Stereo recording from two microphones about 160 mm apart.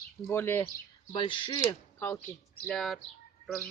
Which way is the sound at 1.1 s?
30° left (ahead or behind).